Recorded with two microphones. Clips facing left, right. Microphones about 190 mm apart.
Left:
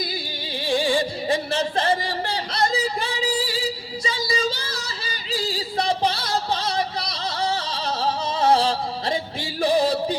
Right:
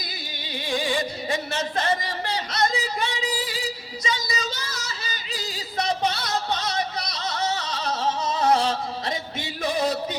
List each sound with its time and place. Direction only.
0.5 s music: 30° left (ahead or behind)
4.0 s female singing: 30° left (ahead or behind)